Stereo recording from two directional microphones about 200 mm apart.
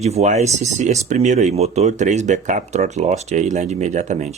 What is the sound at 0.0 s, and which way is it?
Speech, 35° right (ahead or behind).